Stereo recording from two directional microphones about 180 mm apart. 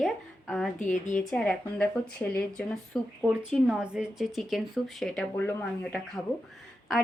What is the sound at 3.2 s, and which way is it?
Speech, 5° right (ahead or behind).